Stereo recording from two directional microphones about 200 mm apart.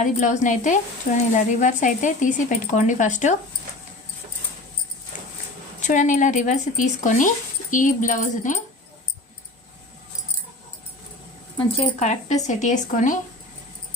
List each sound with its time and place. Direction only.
0.0 s speech: 40° left (ahead or behind)
5.8 s speech: 40° left (ahead or behind)
11.5 s speech: 30° left (ahead or behind)